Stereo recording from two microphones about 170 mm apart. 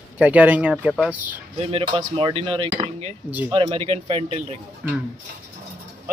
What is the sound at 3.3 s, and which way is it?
Speech, 10° right (ahead or behind).